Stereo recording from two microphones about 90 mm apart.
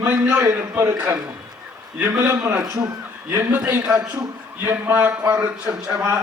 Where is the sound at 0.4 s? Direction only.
35° right (ahead or behind).